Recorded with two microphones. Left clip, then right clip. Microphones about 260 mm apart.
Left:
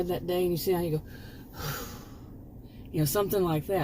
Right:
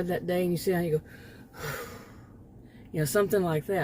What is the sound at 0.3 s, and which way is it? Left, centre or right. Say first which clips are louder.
Speech: left 1 dB; right.